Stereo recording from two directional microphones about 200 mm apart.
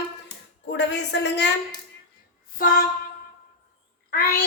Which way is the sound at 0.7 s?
60° left (ahead or behind).